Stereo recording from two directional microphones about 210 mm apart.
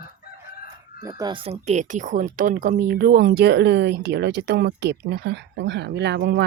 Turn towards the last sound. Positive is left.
turn(degrees=-55)  # may be behind; listen again after turning